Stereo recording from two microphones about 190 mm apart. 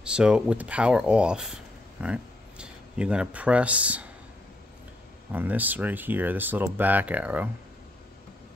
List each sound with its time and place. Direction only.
0.0 s speech: 5° right (ahead or behind)
5.3 s speech: 10° right (ahead or behind)